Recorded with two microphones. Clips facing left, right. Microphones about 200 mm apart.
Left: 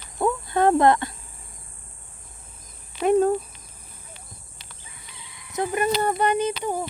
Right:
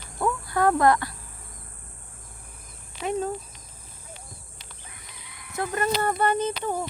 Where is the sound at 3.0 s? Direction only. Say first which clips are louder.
Left 9 dB; 55° left (ahead or behind).